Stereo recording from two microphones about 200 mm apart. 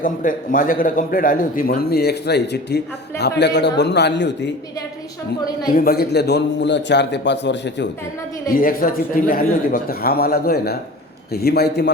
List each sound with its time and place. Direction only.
0.0 s a man's voice: 40° left (ahead or behind); by 4.5 s 60° left (ahead or behind)
5.7 s a man's voice: 50° left (ahead or behind)
8.4 s a man's voice: 45° left (ahead or behind)